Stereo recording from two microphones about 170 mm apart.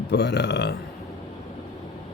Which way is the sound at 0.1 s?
90° left.